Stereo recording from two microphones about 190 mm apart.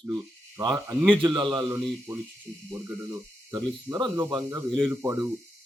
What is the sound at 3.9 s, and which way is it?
A man's voice, 15° right (ahead or behind).